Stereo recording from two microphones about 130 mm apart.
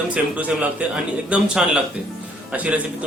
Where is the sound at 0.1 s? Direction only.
10° right (ahead or behind).